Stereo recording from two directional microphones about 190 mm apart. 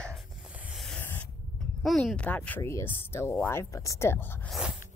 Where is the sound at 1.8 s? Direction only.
5° left (ahead or behind).